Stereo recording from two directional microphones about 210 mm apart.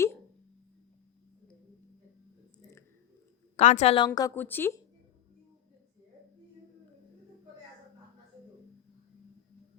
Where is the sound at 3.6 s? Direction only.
30° left (ahead or behind); by 4.7 s 10° left (ahead or behind).